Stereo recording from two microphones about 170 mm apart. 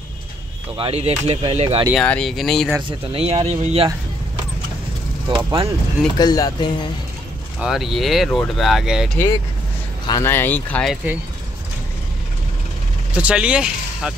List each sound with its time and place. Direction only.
0.7 s speech: 35° right (ahead or behind)
2.0 s speech: 5° left (ahead or behind)
3.1 s speech: 35° right (ahead or behind)
5.3 s speech: 30° right (ahead or behind)
6.1 s speech: 25° left (ahead or behind)
7.6 s speech: centre (ahead or behind)
10.0 s speech: 15° left (ahead or behind)
13.1 s speech: 5° right (ahead or behind)